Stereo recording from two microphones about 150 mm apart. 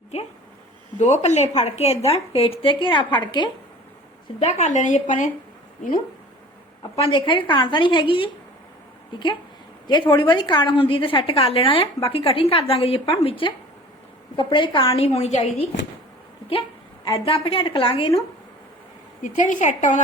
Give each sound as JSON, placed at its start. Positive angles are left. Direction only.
{"t": 0.9, "sound": "a woman's voice", "side_deg": 50}
{"t": 4.4, "sound": "a woman's voice", "side_deg": 50}
{"t": 6.9, "sound": "a woman's voice", "side_deg": 35}
{"t": 17.1, "sound": "a woman's voice", "side_deg": 35}
{"t": 19.2, "sound": "a woman's voice", "side_deg": 60}